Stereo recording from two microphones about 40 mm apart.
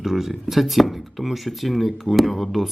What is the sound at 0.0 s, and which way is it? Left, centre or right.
Speech, centre.